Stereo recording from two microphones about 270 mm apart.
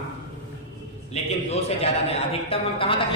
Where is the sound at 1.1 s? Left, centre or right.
Left.